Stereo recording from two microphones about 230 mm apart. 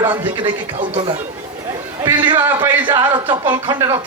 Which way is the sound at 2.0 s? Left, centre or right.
Centre.